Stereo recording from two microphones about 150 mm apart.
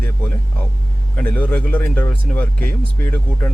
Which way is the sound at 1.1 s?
10° left (ahead or behind).